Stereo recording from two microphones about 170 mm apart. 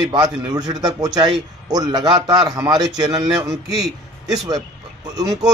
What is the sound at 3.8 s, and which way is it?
Speech, centre (ahead or behind).